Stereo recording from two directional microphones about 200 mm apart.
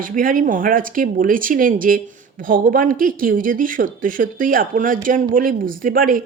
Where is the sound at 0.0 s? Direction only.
45° right (ahead or behind).